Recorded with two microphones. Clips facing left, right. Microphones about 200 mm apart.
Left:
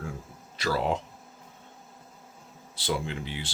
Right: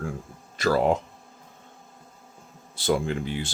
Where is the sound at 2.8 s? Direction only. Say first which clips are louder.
Right 6 dB; 50° right (ahead or behind).